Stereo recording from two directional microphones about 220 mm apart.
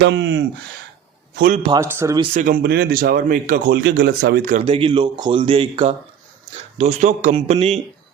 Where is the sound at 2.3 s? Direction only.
35° right (ahead or behind).